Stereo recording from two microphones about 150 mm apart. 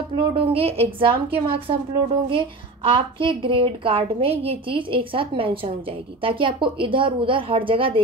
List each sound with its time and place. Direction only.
0.1 s a woman's voice: 40° right (ahead or behind)